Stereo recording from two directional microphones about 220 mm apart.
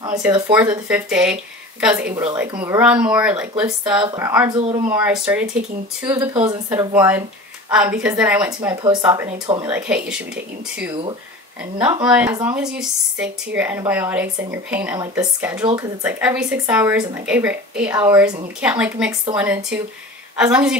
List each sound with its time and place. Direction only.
0.0 s speech: 10° right (ahead or behind)
4.0 s speech: 20° right (ahead or behind)
4.8 s speech: 5° right (ahead or behind)
6.3 s speech: 25° right (ahead or behind)
6.7 s speech: 10° right (ahead or behind)
8.5 s speech: 15° right (ahead or behind)
9.7 s speech: 5° right (ahead or behind)
12.0 s speech: 5° right (ahead or behind)